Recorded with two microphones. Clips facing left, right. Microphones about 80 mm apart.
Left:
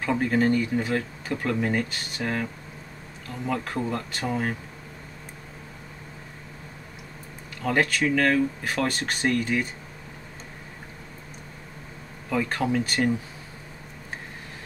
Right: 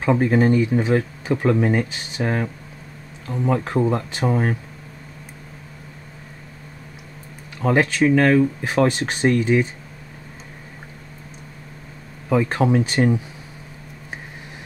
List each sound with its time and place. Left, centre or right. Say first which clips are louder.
0.0 s speech: right 5 dB; right
7.7 s speech: right 6 dB; right
8.6 s speech: right 7 dB; centre
12.3 s speech: right 7 dB; right